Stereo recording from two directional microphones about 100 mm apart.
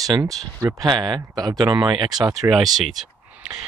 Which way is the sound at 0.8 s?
50° right (ahead or behind).